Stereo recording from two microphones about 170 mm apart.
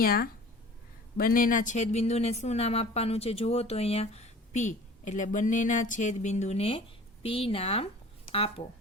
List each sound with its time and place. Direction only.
0.0 s speech: 60° left (ahead or behind); by 8.6 s 30° left (ahead or behind)